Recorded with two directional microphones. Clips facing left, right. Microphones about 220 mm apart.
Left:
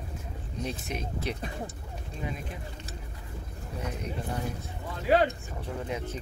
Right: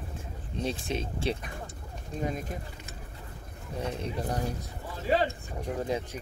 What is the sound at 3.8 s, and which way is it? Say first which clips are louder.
Speech: right 3 dB; 35° right (ahead or behind).